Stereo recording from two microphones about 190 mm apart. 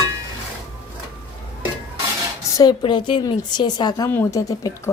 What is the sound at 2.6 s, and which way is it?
Speech, 25° left (ahead or behind).